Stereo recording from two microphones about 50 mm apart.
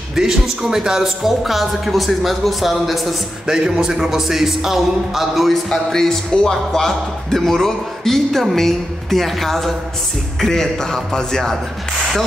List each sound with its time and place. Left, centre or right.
0.1 s a man's voice: centre
3.4 s a man's voice: centre